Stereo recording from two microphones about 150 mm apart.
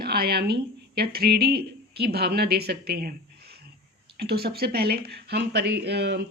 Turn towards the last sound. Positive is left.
turn(degrees=-90)